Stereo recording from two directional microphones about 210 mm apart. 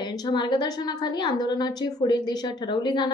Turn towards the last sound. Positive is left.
turn(degrees=20)  # may be behind; listen again after turning